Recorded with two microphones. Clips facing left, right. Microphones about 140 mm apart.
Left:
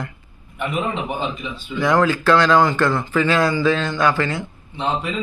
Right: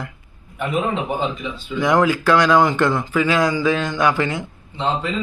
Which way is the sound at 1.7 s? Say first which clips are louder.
Right 1 dB; 20° right (ahead or behind).